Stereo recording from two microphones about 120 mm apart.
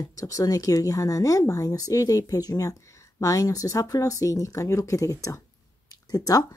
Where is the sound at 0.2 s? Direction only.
30° left (ahead or behind).